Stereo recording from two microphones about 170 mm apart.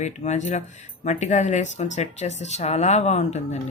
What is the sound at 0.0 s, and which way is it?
Speech, 45° left (ahead or behind).